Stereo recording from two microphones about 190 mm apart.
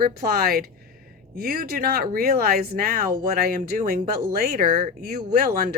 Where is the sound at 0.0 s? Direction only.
55° right (ahead or behind).